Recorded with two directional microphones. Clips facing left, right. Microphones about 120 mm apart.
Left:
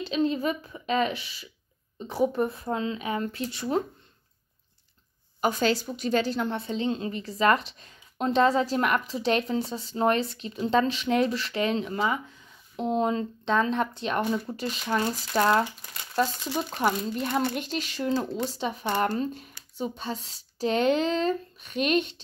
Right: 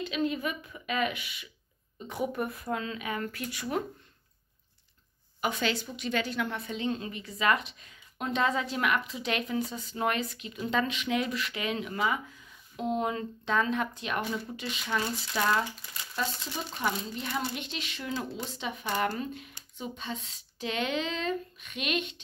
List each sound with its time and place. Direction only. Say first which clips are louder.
0.0 s a woman's voice: left 5 dB; 30° left (ahead or behind)
5.4 s a woman's voice: left 6 dB; 40° left (ahead or behind)
14.4 s speech: left 5 dB; 45° left (ahead or behind)
17.2 s a woman's voice: left 7 dB; 55° left (ahead or behind); by 22.1 s 40° left (ahead or behind)